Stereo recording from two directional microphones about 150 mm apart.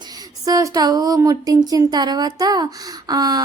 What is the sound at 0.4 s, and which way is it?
A woman's voice, 25° right (ahead or behind).